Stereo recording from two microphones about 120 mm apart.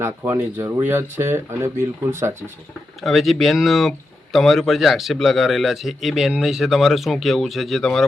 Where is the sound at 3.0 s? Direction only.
Centre (ahead or behind).